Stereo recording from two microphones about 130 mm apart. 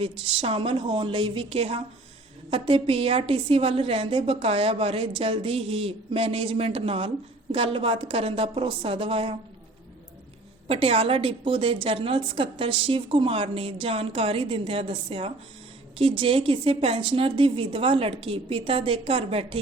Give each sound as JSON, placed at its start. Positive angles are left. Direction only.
{"t": 0.0, "sound": "a woman's voice", "side_deg": -45}
{"t": 10.7, "sound": "a woman's voice", "side_deg": -45}